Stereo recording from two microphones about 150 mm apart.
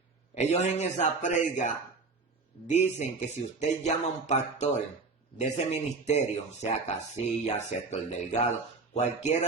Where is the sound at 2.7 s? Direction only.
50° left (ahead or behind).